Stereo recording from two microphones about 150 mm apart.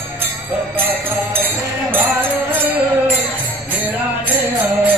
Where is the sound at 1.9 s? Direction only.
10° right (ahead or behind).